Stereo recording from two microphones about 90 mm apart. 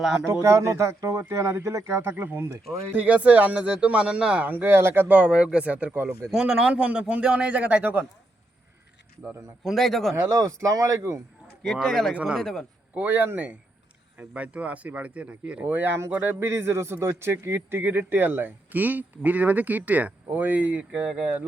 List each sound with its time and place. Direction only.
0.0 s speech: 5° right (ahead or behind)
0.4 s speech: 30° right (ahead or behind)
6.3 s a man's voice: 5° right (ahead or behind)
9.6 s speech: centre (ahead or behind)
10.3 s speech: 35° right (ahead or behind)
11.6 s speech: 5° left (ahead or behind)
12.1 s a man's voice: 15° right (ahead or behind)
12.4 s speech: 5° left (ahead or behind)
12.9 s speech: 20° right (ahead or behind)